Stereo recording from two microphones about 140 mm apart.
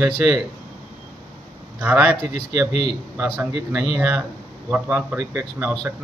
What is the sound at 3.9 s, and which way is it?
Speech, 10° right (ahead or behind).